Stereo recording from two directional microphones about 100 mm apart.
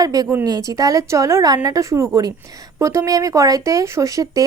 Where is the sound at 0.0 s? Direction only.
40° right (ahead or behind).